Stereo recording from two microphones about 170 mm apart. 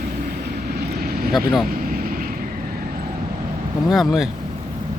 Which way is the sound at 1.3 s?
Centre (ahead or behind).